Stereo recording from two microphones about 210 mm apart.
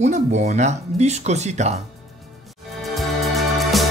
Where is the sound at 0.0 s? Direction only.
35° right (ahead or behind).